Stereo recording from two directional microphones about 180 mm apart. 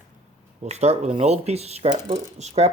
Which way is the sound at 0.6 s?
35° right (ahead or behind).